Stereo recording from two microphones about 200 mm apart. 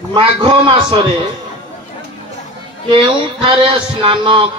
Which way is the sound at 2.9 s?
25° right (ahead or behind).